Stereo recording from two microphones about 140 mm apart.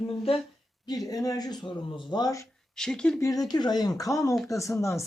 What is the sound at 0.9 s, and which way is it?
Speech, 25° left (ahead or behind).